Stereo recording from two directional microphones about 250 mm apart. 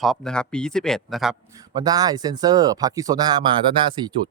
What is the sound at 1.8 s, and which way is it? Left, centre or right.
Speech, centre.